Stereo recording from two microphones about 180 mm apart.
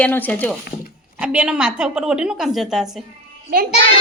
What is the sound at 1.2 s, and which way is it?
A woman's voice, 5° right (ahead or behind).